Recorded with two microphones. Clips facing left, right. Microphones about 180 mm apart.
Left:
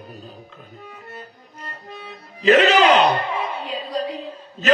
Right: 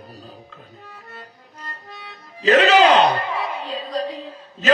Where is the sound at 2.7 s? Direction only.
35° right (ahead or behind).